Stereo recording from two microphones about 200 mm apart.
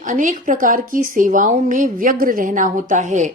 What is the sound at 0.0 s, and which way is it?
Speech, 40° right (ahead or behind).